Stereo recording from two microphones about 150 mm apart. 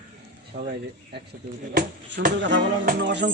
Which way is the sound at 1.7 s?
70° right (ahead or behind).